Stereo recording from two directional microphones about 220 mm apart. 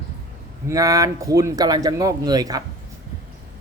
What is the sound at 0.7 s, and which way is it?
Speech, 15° right (ahead or behind).